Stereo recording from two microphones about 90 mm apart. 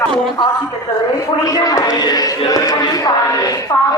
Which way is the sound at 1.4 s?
40° left (ahead or behind).